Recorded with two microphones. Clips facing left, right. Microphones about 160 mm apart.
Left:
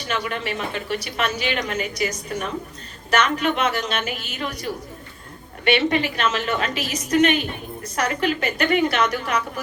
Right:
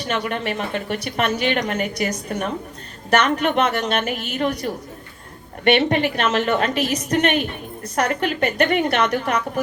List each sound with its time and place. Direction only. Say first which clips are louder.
0.1 s a woman's voice: right 2 dB; 50° right (ahead or behind)